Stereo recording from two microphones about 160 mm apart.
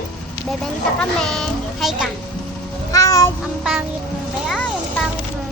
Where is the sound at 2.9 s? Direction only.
20° left (ahead or behind).